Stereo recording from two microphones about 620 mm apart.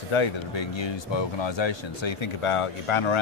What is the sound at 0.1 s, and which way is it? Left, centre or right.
Speech, left.